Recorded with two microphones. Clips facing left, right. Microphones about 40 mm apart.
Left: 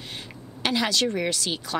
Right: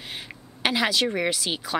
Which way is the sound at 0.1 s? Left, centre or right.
Centre.